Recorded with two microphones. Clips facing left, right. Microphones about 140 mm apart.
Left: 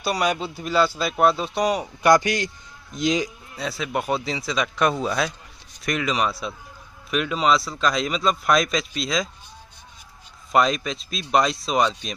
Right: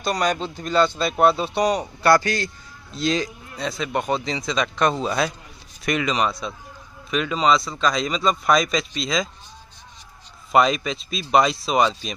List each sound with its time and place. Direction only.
0.0 s a man's voice: 5° left (ahead or behind)
2.0 s a man's voice: 15° left (ahead or behind)
10.5 s a man's voice: centre (ahead or behind)